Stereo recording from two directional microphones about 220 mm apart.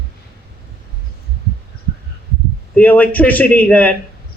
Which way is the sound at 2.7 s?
5° left (ahead or behind).